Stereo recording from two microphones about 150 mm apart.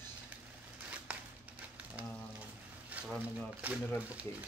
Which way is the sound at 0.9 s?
10° right (ahead or behind).